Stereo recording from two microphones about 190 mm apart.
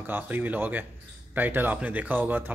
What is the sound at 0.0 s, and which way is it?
Speech, 10° right (ahead or behind).